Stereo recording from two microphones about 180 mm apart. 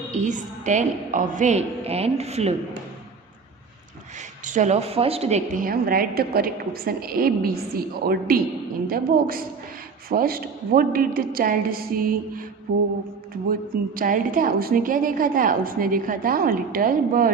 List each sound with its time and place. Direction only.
0.1 s a woman's voice: 40° right (ahead or behind)
4.4 s a woman's voice: 40° right (ahead or behind)
5.5 s a woman's voice: 55° right (ahead or behind)
13.9 s a woman's voice: 50° right (ahead or behind)